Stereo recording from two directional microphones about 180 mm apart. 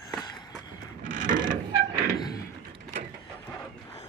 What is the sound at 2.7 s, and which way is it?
Mechanisms, 40° right (ahead or behind).